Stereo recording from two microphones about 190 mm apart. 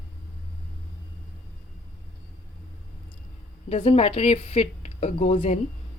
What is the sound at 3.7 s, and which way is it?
Speech, 30° left (ahead or behind).